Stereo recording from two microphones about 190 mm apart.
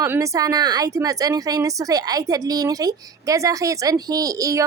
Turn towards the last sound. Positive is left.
turn(degrees=-15)  # may be behind; listen again after turning